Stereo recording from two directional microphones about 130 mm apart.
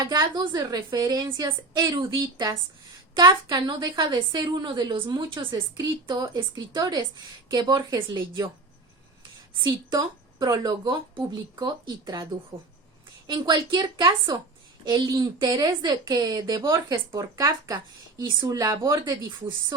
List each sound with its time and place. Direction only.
0.0 s a woman's voice: 30° right (ahead or behind)
10.3 s a woman's voice: 25° right (ahead or behind)